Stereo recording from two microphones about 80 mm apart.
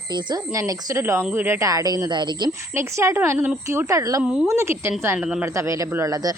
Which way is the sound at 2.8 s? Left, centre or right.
Right.